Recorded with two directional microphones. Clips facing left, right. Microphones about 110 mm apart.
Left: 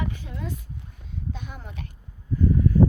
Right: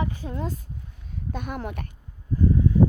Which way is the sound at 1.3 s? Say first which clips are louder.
Right 8 dB; 60° right (ahead or behind).